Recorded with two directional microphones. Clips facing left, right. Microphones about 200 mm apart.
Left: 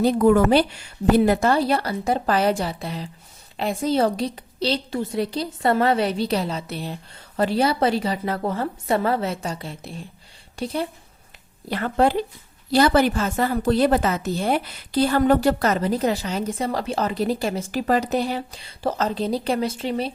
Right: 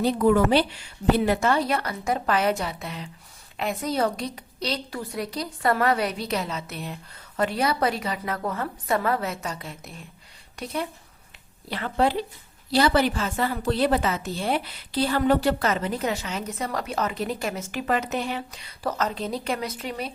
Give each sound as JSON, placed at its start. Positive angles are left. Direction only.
{"t": 0.0, "sound": "a woman's voice", "side_deg": 45}
{"t": 11.7, "sound": "a woman's voice", "side_deg": 45}